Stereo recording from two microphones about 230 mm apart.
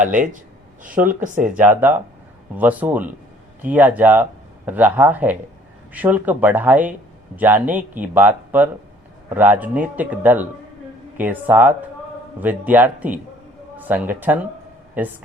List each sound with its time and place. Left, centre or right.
0.0 s speech: right
1.5 s speech: centre